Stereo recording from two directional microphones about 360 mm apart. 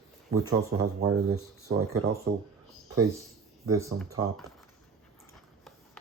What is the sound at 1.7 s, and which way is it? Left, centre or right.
Speech, right.